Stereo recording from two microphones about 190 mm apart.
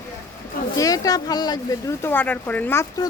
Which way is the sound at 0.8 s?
20° left (ahead or behind).